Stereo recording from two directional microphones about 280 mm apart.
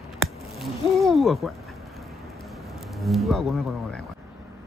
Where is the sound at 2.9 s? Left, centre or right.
Centre.